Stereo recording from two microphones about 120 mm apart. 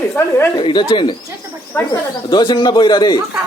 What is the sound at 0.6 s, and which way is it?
Speech, 40° left (ahead or behind).